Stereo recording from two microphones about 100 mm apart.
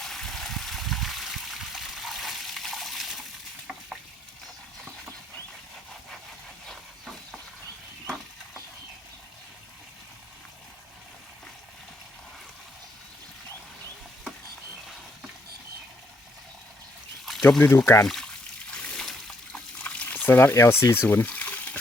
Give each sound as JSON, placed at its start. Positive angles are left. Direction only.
{"t": 0.0, "sound": "water", "side_deg": 5}
{"t": 6.7, "sound": "a sound", "side_deg": 0}
{"t": 17.6, "sound": "speech", "side_deg": 20}
{"t": 18.0, "sound": "speech", "side_deg": 5}
{"t": 18.7, "sound": "splash", "side_deg": 5}
{"t": 19.5, "sound": "pour", "side_deg": 15}